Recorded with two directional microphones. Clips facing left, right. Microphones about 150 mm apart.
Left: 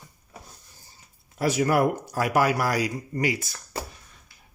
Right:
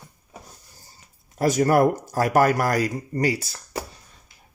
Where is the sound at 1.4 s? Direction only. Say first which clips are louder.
Right 4 dB; 40° right (ahead or behind).